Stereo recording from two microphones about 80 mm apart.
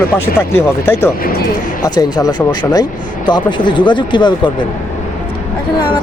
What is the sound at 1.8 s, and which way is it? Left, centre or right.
Speech, left.